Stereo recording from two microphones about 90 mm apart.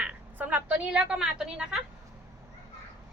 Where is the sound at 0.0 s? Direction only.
15° right (ahead or behind).